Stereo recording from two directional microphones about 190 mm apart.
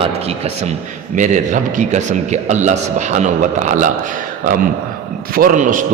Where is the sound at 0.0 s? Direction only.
35° right (ahead or behind).